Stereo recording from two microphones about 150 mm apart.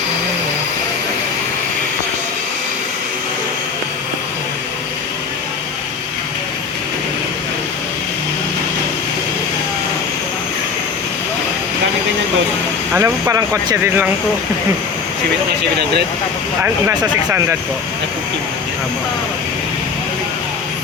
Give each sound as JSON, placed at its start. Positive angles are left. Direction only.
{"t": 12.9, "sound": "speech", "side_deg": -15}